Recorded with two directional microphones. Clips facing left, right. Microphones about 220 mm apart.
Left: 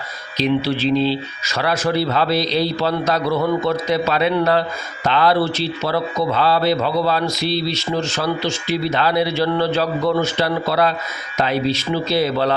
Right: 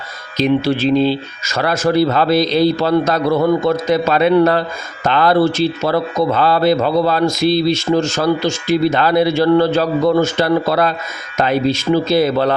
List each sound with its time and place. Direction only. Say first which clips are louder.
0.3 s speech: right 4 dB; 45° right (ahead or behind)